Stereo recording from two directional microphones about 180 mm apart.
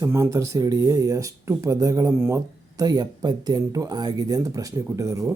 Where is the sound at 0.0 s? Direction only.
15° right (ahead or behind).